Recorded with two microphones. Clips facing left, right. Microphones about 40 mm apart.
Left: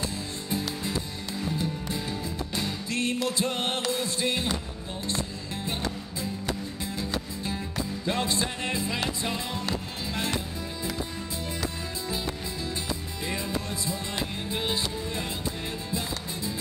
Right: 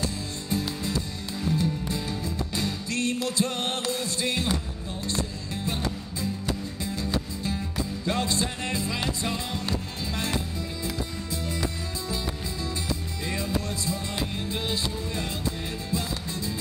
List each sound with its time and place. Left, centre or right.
0.0 s music: left
2.9 s music: left
8.1 s music: left
13.3 s music: centre